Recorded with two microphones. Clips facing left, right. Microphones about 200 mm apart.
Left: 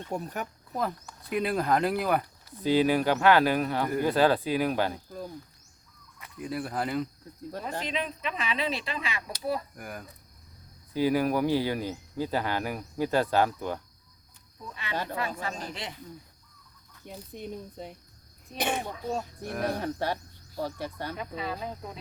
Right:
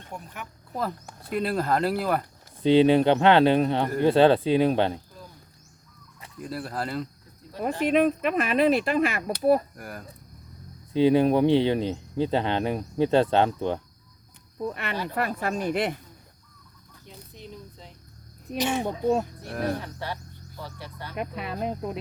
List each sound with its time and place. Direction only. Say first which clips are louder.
0.1 s speech: left 6 dB; 40° left (ahead or behind)
1.3 s speech: right 1 dB; centre (ahead or behind)
2.6 s speech: right 6 dB; 25° right (ahead or behind)
6.4 s speech: even; centre (ahead or behind)
7.6 s speech: right 12 dB; 55° right (ahead or behind)
9.7 s speech: right 1 dB; centre (ahead or behind)
10.9 s speech: right 6 dB; 25° right (ahead or behind)
14.7 s speech: left 1 dB; 60° right (ahead or behind)
17.1 s speech: left 5 dB; 55° left (ahead or behind)
19.8 s speech: left 5 dB; 45° left (ahead or behind)
21.2 s speech: right 7 dB; 65° right (ahead or behind)